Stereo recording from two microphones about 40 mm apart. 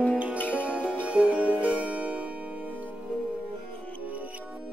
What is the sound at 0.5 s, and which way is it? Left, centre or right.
Music, right.